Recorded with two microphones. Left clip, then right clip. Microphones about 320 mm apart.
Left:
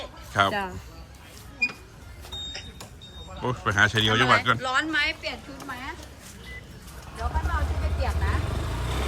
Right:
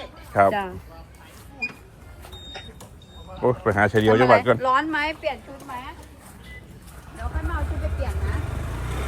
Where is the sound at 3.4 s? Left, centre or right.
Centre.